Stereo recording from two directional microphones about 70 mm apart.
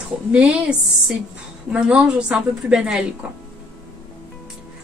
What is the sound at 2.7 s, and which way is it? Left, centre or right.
Speech, centre.